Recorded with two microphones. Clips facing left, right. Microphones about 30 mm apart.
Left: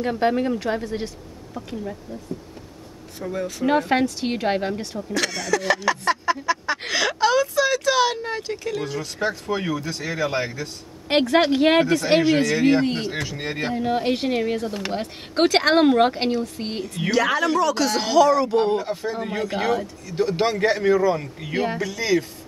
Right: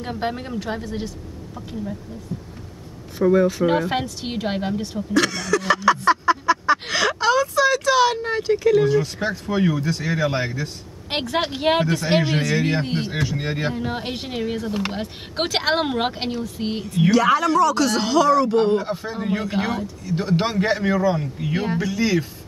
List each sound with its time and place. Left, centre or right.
0.2 s speech: centre
3.2 s a man's voice: centre
3.6 s speech: centre
5.1 s a man's voice: centre
21.4 s speech: centre
21.7 s speech: centre